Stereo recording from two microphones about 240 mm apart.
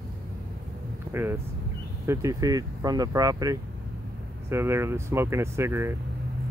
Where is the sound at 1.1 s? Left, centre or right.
Centre.